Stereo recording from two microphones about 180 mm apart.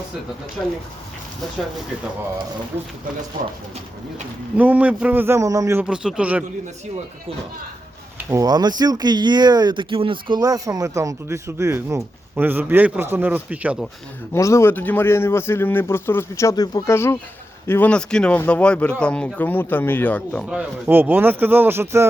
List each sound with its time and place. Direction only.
4.5 s speech: 10° right (ahead or behind)
5.8 s speech: 5° right (ahead or behind)
8.2 s speech: 15° right (ahead or behind)
14.3 s a man's voice: 15° left (ahead or behind)
20.5 s speech: 10° right (ahead or behind)